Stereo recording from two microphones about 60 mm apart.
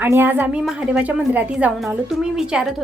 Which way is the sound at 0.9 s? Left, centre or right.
Right.